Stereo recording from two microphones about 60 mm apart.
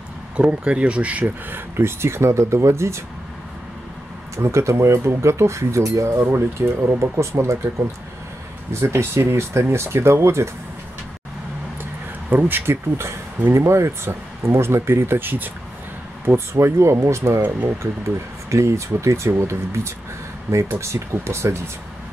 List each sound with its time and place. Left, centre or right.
0.4 s speech: centre
1.5 s speech: right
4.4 s speech: right
6.2 s speech: right
8.7 s speech: right
11.8 s a sound: right
13.5 s speech: right
16.3 s speech: right
18.5 s speech: right